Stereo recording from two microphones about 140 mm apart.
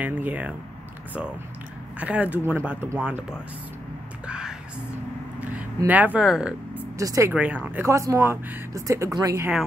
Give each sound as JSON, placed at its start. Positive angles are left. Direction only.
{"t": 0.0, "sound": "speech", "side_deg": -10}
{"t": 2.0, "sound": "speech", "side_deg": -10}
{"t": 4.3, "sound": "music", "side_deg": -5}
{"t": 5.9, "sound": "speech", "side_deg": -10}
{"t": 7.0, "sound": "speech", "side_deg": -20}
{"t": 7.3, "sound": "speech", "side_deg": -10}